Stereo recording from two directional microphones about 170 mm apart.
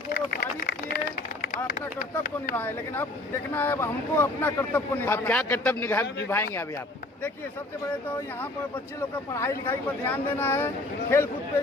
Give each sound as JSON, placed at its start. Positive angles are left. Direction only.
{"t": 0.3, "sound": "a sound", "side_deg": 65}
{"t": 2.0, "sound": "speech", "side_deg": 55}
{"t": 2.6, "sound": "speech", "side_deg": 10}
{"t": 9.0, "sound": "speech", "side_deg": 15}